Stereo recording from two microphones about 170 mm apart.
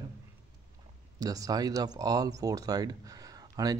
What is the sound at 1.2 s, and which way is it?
Speech, 20° right (ahead or behind).